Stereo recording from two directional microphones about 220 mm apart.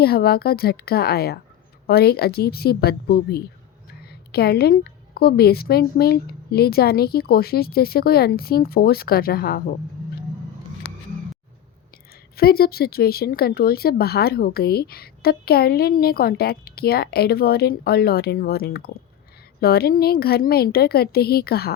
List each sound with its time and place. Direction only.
0.0 s speech: 45° left (ahead or behind)
12.4 s speech: 45° left (ahead or behind)